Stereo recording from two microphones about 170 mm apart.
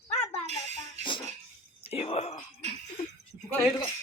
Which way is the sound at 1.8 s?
35° left (ahead or behind).